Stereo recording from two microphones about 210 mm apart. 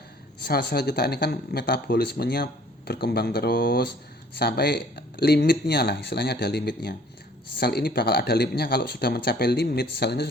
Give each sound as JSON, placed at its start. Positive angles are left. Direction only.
{"t": 0.7, "sound": "speech", "side_deg": 50}